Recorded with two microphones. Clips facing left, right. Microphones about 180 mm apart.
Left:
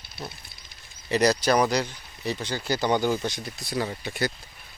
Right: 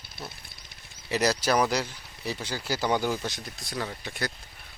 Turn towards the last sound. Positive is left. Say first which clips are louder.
# left 5 dB
turn(degrees=5)  # may be behind; listen again after turning